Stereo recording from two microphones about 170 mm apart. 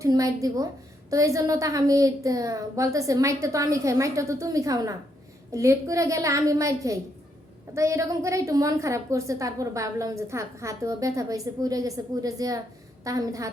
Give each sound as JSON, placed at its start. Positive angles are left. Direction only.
{"t": 0.0, "sound": "a woman's voice", "side_deg": -20}